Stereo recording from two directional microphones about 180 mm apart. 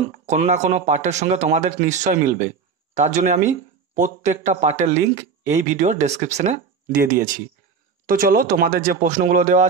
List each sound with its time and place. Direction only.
0.3 s speech: 40° right (ahead or behind)